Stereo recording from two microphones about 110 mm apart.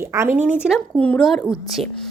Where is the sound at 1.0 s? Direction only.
10° left (ahead or behind).